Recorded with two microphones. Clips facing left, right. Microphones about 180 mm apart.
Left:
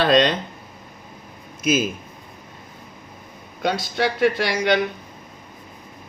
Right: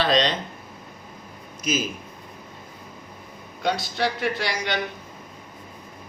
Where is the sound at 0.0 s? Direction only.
55° left (ahead or behind).